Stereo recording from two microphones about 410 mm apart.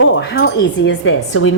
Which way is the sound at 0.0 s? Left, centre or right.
Left.